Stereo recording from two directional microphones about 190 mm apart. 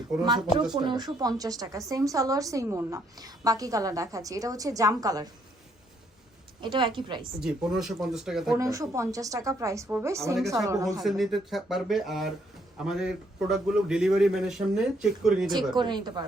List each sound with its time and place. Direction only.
0.7 s a woman's voice: 20° right (ahead or behind)
6.6 s a woman's voice: 25° right (ahead or behind)
7.4 s a man's voice: centre (ahead or behind)
8.5 s a woman's voice: 15° right (ahead or behind)
11.0 s a man's voice: centre (ahead or behind)
15.5 s a woman's voice: 25° right (ahead or behind)